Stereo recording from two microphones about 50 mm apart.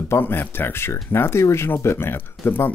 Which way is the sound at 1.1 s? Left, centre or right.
Left.